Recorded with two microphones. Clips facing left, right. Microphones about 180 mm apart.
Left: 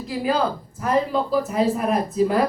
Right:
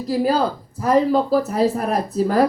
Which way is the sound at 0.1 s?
35° right (ahead or behind).